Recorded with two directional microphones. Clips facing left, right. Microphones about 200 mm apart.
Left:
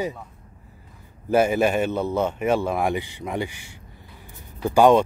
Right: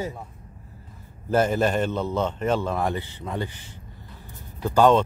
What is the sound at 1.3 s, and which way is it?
Speech, 10° left (ahead or behind).